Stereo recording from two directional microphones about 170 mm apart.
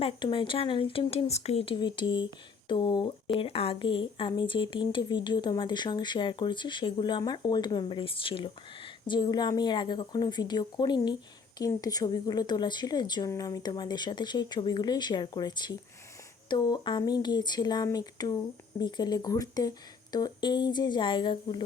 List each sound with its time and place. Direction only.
0.0 s speech: 30° left (ahead or behind)